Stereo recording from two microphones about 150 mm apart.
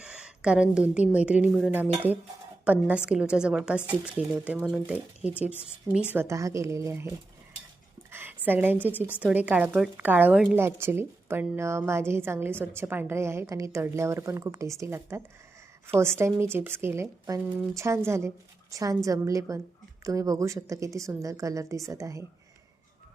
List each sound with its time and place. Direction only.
0.0 s a woman's voice: 5° right (ahead or behind)
6.1 s a woman's voice: 20° right (ahead or behind)
8.1 s a sound: 15° right (ahead or behind)
9.2 s a woman's voice: 10° right (ahead or behind)